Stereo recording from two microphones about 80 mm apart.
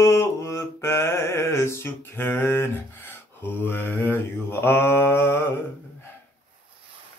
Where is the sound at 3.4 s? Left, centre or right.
Left.